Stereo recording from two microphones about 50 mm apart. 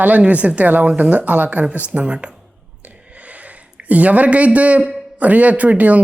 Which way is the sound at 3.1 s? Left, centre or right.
Right.